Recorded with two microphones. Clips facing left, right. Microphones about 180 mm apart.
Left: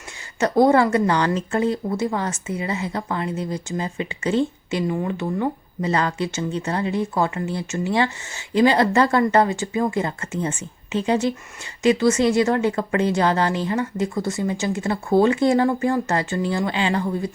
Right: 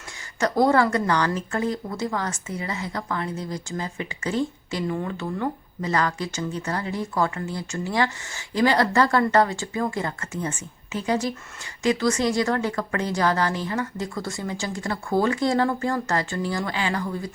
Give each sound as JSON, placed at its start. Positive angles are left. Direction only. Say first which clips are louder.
{"t": 0.3, "sound": "speech", "louder": "left 3 dB", "side_deg": 25}